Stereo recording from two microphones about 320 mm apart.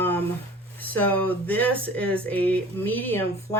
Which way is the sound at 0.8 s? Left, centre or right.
Centre.